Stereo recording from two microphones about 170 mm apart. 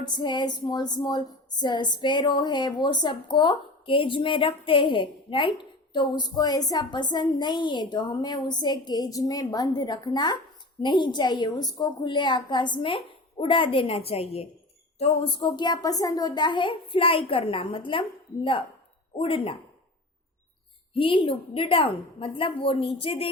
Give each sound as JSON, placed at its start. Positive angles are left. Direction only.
{"t": 0.0, "sound": "a woman's voice", "side_deg": 25}
{"t": 19.1, "sound": "a woman's voice", "side_deg": 35}
{"t": 20.9, "sound": "a woman's voice", "side_deg": 30}